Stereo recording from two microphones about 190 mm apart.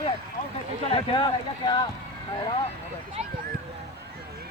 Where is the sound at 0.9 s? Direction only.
30° left (ahead or behind).